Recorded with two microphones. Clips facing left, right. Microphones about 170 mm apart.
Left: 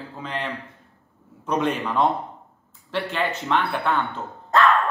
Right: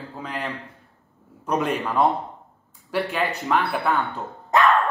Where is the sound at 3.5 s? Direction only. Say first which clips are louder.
Right 1 dB; 5° right (ahead or behind).